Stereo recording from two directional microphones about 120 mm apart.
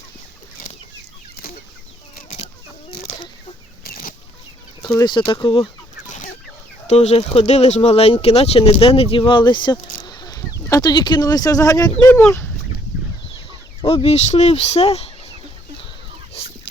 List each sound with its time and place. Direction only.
4.9 s speech: 40° left (ahead or behind)
6.1 s chicken: 90° left
6.8 s speech: 65° left (ahead or behind); by 12.1 s 30° left (ahead or behind)
13.8 s speech: 40° left (ahead or behind)
14.1 s speech: 70° left (ahead or behind)
16.4 s fowl: 55° left (ahead or behind)